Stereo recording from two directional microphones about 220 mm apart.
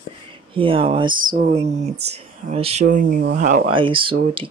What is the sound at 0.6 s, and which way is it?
Speech, 25° right (ahead or behind).